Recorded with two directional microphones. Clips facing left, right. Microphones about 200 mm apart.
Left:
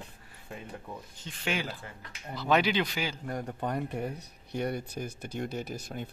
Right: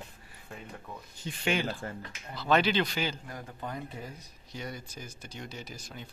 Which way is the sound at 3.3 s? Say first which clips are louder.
Left 7 dB; 60° left (ahead or behind).